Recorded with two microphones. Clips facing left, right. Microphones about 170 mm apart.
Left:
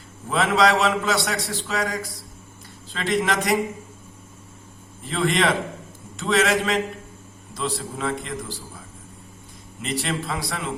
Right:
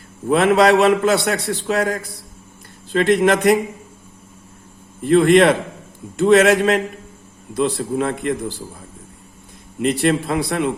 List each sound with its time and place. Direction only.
0.3 s a man's voice: 55° right (ahead or behind)
5.0 s a man's voice: 60° right (ahead or behind)
9.8 s a man's voice: 55° right (ahead or behind)